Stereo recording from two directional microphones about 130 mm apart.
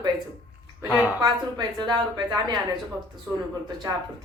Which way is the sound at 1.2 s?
35° right (ahead or behind).